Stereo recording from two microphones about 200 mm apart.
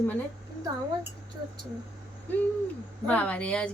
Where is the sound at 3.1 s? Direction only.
5° left (ahead or behind).